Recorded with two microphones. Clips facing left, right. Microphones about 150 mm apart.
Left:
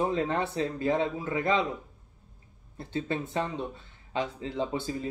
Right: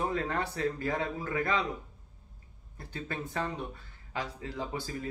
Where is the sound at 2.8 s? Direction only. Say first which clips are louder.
Left 7 dB; 25° left (ahead or behind).